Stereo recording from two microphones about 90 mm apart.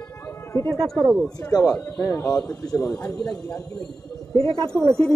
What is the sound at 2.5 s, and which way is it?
Speech, 40° left (ahead or behind).